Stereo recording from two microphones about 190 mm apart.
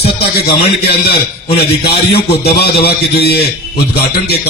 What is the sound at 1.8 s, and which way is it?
A man's voice, 55° left (ahead or behind).